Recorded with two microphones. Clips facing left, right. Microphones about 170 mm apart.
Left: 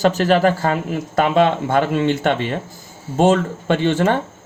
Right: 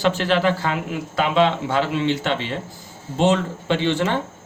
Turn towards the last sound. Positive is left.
turn(degrees=50)  # may be behind; listen again after turning